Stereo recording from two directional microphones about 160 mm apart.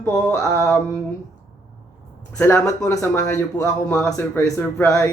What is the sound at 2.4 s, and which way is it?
Speech, 15° left (ahead or behind).